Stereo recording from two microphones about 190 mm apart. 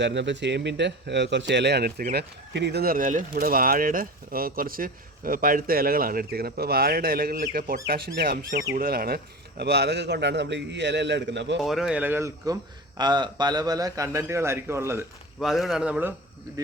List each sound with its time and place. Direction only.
0.0 s a man's voice: 70° right (ahead or behind)
11.6 s a man's voice: centre (ahead or behind)
15.4 s a man's voice: centre (ahead or behind)